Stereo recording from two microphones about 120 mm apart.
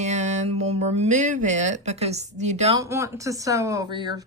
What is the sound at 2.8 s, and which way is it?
Speech, 25° right (ahead or behind).